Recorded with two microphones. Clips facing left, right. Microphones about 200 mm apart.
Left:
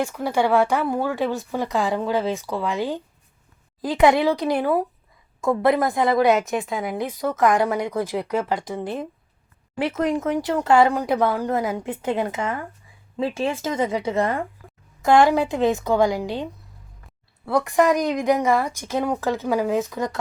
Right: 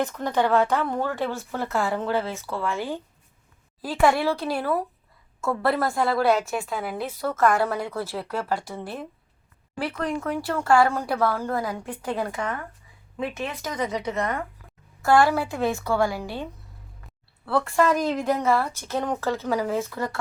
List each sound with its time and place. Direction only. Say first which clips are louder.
0.0 s a woman's voice: left 2 dB; 10° left (ahead or behind)